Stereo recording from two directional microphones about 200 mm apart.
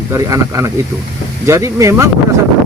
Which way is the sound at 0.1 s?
15° right (ahead or behind).